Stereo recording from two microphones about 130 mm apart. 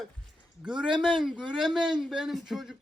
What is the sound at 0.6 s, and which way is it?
Speech, 5° right (ahead or behind).